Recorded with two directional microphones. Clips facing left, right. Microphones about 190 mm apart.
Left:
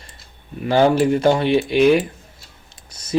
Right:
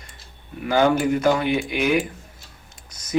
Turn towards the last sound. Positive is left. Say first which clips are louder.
# left 2 dB
turn(degrees=30)  # may be behind; listen again after turning